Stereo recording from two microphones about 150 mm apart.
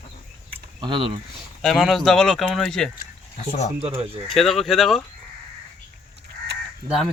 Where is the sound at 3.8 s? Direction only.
40° right (ahead or behind).